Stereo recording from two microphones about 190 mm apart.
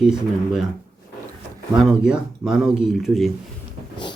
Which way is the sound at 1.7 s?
5° right (ahead or behind).